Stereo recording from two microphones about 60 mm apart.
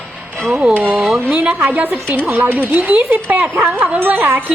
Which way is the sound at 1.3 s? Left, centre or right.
Right.